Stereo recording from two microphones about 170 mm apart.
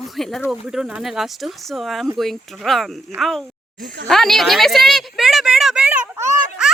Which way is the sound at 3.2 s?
Centre (ahead or behind).